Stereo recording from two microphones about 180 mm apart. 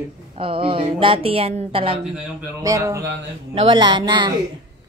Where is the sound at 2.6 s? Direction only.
20° right (ahead or behind).